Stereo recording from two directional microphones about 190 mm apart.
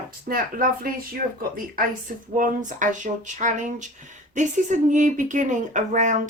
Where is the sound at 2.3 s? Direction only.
45° right (ahead or behind).